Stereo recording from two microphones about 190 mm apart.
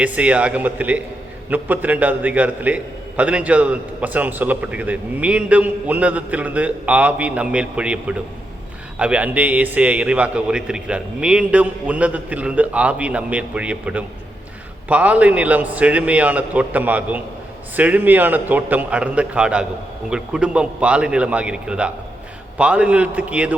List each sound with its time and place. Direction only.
0.0 s a man's voice: 5° right (ahead or behind)